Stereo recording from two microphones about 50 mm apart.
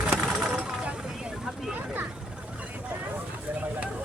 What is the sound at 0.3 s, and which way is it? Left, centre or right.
Vehicle, centre.